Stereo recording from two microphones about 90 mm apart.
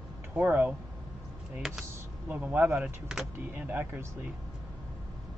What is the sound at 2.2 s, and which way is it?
Speech, 20° right (ahead or behind).